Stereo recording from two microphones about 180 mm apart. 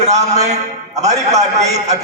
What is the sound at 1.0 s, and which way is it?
Speech, 40° right (ahead or behind).